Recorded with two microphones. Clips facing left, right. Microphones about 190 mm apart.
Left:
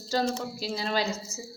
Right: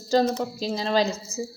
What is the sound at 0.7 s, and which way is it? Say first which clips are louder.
Speech: right 6 dB; 40° right (ahead or behind).